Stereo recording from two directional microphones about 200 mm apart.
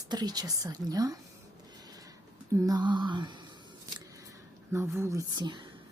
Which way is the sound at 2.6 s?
20° right (ahead or behind).